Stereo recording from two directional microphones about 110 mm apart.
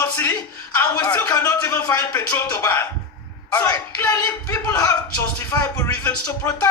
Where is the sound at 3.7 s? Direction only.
35° left (ahead or behind).